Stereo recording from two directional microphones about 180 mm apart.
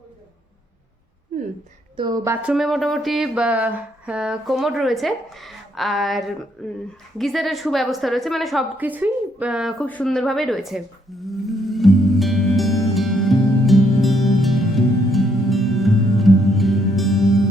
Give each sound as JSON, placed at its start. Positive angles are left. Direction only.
{"t": 2.0, "sound": "a woman's voice", "side_deg": -20}
{"t": 2.5, "sound": "speech", "side_deg": 0}
{"t": 9.8, "sound": "a sound", "side_deg": 5}